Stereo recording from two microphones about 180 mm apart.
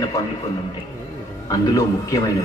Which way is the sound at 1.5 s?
20° left (ahead or behind).